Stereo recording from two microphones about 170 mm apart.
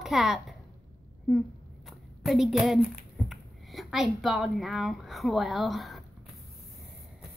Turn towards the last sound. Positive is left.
turn(degrees=0)  # may be behind; listen again after turning